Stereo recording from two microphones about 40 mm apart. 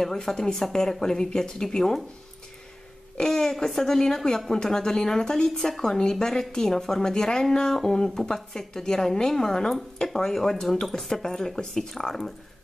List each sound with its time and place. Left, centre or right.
0.0 s speech: centre
3.2 s speech: centre